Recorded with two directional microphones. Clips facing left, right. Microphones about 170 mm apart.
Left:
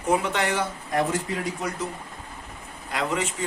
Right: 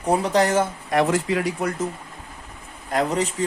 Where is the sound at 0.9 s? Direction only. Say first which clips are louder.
Right 5 dB; 90° right.